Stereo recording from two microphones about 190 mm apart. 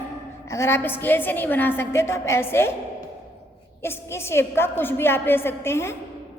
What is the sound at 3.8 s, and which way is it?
A woman's voice, 15° left (ahead or behind).